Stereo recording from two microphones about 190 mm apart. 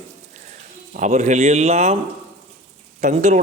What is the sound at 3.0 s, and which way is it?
Speech, 40° right (ahead or behind).